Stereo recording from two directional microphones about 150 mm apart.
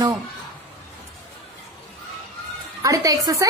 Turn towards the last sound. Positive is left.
turn(degrees=-25)  # may be behind; listen again after turning